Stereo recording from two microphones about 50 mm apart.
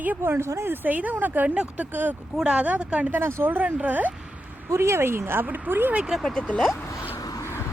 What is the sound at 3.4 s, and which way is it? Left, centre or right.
Speech, right.